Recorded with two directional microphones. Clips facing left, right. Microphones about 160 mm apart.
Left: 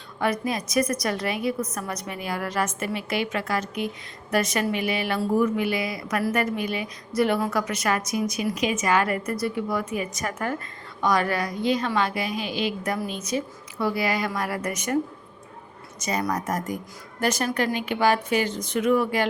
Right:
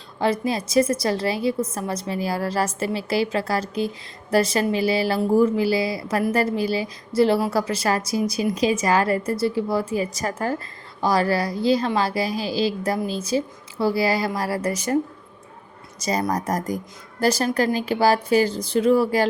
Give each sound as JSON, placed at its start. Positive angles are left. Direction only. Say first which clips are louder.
{"t": 0.2, "sound": "a woman's voice", "louder": "right 3 dB", "side_deg": -30}
{"t": 16.0, "sound": "a woman's voice", "louder": "right 3 dB", "side_deg": -35}